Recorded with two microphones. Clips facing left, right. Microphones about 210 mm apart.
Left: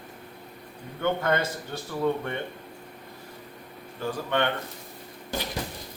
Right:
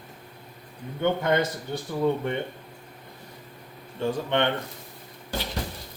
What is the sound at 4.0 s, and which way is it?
Speech, 20° right (ahead or behind).